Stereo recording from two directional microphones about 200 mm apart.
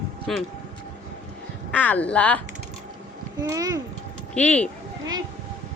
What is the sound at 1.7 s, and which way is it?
Speech, 5° left (ahead or behind).